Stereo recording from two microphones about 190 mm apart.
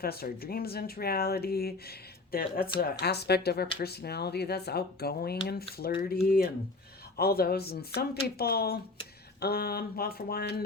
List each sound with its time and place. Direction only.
0.0 s speech: 55° left (ahead or behind)